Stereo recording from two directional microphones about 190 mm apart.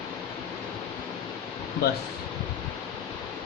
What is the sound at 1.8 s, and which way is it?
Speech, 55° left (ahead or behind).